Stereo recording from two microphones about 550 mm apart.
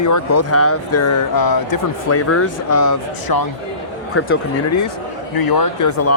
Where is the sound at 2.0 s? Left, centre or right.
Left.